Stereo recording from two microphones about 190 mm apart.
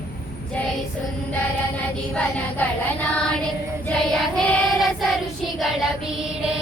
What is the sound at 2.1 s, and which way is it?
Music, 5° left (ahead or behind).